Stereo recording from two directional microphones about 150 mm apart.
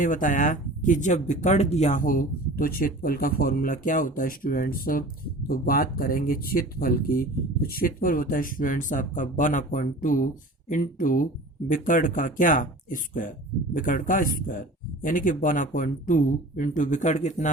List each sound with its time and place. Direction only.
0.0 s speech: 60° left (ahead or behind)